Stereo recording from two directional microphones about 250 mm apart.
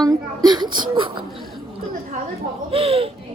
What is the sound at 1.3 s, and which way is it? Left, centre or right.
Chatter, centre.